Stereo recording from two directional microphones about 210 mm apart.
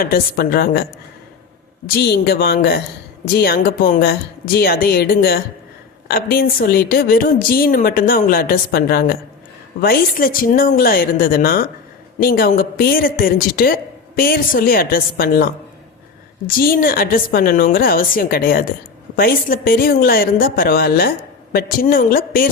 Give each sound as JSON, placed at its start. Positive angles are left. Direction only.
{"t": 0.0, "sound": "a woman's voice", "side_deg": 45}
{"t": 1.9, "sound": "a woman's voice", "side_deg": 50}
{"t": 16.5, "sound": "a woman's voice", "side_deg": 45}